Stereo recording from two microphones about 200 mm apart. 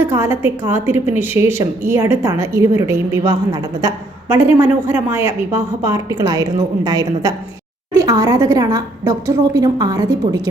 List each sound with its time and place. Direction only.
0.0 s a woman's voice: 10° right (ahead or behind)